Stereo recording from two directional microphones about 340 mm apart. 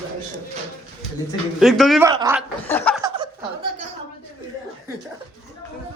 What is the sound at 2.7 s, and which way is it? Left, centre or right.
Chuckle, centre.